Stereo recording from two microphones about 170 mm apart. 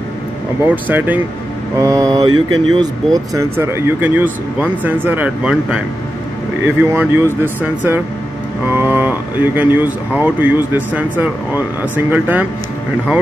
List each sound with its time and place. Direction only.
0.7 s speech: 10° right (ahead or behind); by 2.9 s 25° right (ahead or behind)
3.3 s speech: 15° right (ahead or behind)